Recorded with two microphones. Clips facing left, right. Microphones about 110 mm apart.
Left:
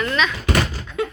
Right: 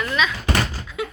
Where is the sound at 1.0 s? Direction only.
10° right (ahead or behind).